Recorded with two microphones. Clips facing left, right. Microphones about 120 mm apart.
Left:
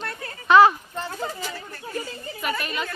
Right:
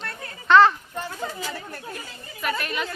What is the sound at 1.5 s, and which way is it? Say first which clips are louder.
Speech: right 2 dB; 55° right (ahead or behind).